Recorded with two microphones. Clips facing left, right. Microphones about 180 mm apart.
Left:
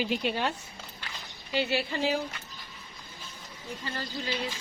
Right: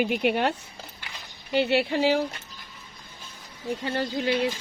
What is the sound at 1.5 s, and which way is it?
Speech, 60° right (ahead or behind).